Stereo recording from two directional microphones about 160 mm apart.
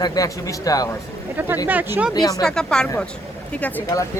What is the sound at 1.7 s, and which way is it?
Speech, 10° right (ahead or behind).